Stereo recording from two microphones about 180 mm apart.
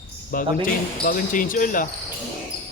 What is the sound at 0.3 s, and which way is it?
Speech, 50° left (ahead or behind).